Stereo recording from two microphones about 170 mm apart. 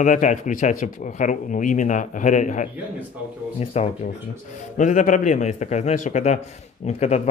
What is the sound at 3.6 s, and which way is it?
Speech, 35° left (ahead or behind).